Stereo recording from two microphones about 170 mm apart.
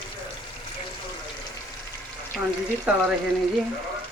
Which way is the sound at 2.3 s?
Centre (ahead or behind).